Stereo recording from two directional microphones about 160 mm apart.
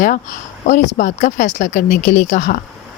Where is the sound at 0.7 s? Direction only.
55° left (ahead or behind).